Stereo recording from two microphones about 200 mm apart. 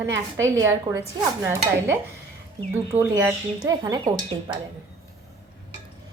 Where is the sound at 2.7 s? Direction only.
15° right (ahead or behind).